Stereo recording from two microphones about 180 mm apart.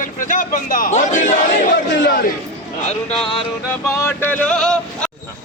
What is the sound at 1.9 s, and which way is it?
Speech, 90° left.